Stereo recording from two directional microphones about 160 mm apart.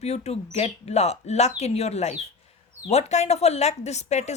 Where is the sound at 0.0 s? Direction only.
40° left (ahead or behind).